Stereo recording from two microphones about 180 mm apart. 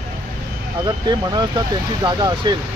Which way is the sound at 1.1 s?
25° right (ahead or behind).